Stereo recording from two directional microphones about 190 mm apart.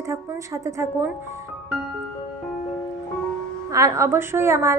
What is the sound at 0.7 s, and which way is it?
Speech, 15° right (ahead or behind).